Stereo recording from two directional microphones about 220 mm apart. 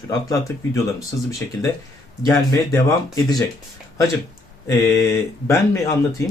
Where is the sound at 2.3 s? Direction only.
15° left (ahead or behind).